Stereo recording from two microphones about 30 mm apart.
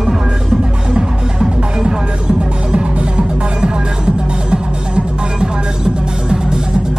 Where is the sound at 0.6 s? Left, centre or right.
Right.